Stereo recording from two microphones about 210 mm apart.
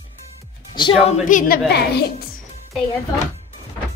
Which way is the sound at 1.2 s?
40° left (ahead or behind).